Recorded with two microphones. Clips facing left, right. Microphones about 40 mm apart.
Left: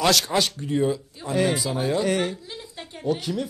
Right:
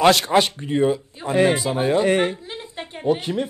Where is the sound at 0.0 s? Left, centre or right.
Right.